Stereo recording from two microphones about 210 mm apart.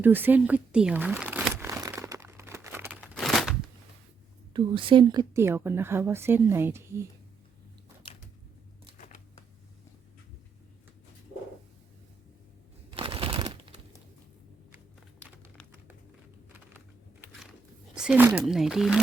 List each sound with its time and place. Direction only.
0.0 s crumpling: 10° right (ahead or behind)
3.0 s crumpling: centre (ahead or behind)
4.5 s a woman's voice: 25° right (ahead or behind)
13.0 s a sound: 25° right (ahead or behind)
17.9 s speech: 5° right (ahead or behind)